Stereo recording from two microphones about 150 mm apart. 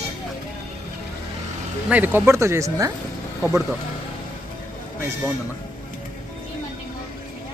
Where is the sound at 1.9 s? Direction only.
10° right (ahead or behind).